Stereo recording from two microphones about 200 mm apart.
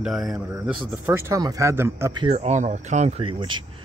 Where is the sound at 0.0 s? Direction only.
Centre (ahead or behind).